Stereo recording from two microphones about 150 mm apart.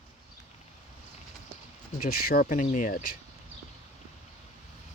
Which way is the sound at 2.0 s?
80° left.